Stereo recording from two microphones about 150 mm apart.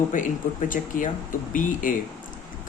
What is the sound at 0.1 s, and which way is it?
Speech, 60° left (ahead or behind).